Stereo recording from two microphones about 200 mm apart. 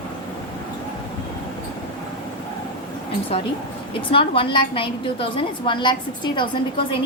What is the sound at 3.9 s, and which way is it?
A woman's voice, 25° left (ahead or behind).